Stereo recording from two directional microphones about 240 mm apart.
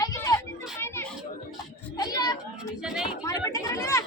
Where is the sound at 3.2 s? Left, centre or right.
Centre.